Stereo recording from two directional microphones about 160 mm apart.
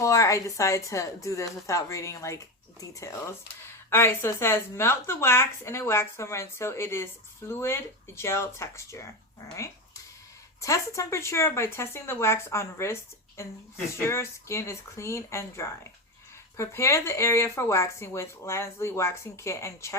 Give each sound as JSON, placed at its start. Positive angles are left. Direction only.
{"t": 0.0, "sound": "a woman's voice", "side_deg": 20}
{"t": 3.8, "sound": "speech", "side_deg": 15}
{"t": 10.6, "sound": "speech", "side_deg": 20}